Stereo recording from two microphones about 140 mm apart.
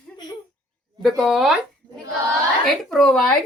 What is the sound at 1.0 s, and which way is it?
Speech, centre (ahead or behind).